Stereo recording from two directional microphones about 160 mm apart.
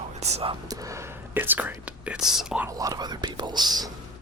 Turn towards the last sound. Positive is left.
turn(degrees=-25)  # may be behind; listen again after turning